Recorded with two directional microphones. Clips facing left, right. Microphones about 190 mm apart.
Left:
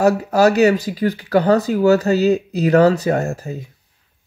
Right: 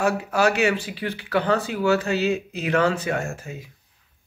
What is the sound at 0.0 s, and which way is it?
Speech, 40° left (ahead or behind).